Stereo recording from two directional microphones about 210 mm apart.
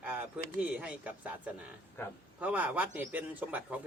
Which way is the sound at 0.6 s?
5° right (ahead or behind).